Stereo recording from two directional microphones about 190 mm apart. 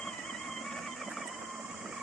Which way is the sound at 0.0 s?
Centre (ahead or behind).